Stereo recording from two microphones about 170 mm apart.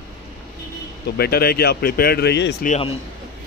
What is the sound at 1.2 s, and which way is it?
Speech, 65° left (ahead or behind).